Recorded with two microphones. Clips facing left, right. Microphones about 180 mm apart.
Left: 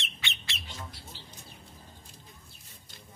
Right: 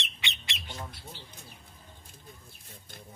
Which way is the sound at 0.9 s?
55° right (ahead or behind).